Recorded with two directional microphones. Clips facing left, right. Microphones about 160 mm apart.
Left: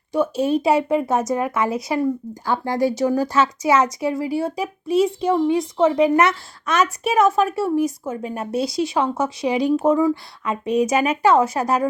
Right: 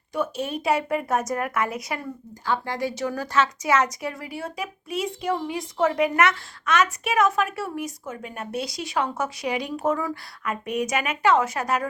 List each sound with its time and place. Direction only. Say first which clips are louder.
0.1 s speech: left 8 dB; 30° left (ahead or behind)